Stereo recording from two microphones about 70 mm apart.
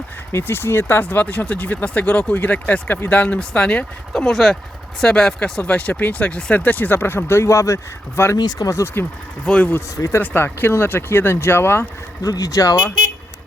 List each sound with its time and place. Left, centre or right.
0.3 s speech: left; by 4.3 s centre
4.3 s speech: centre; by 8.4 s left
8.4 s speech: left
9.5 s speech: centre
10.2 s speech: left
12.2 s speech: left